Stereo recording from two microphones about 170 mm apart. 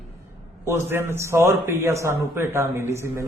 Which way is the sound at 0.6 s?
15° right (ahead or behind).